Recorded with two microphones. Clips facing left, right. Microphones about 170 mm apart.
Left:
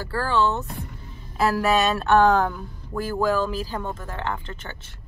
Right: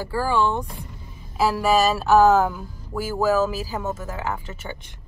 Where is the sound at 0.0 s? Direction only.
10° right (ahead or behind).